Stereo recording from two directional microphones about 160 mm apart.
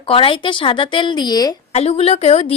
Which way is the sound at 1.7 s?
40° left (ahead or behind).